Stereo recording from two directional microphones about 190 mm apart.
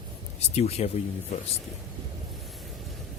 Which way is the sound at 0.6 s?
35° left (ahead or behind).